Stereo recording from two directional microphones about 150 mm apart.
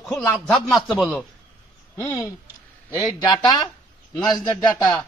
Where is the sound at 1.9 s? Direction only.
20° left (ahead or behind).